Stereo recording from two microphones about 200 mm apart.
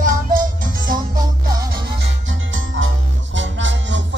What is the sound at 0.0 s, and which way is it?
Music, 45° right (ahead or behind).